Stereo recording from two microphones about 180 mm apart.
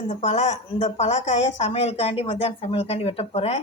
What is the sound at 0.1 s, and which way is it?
A woman's voice, 40° left (ahead or behind).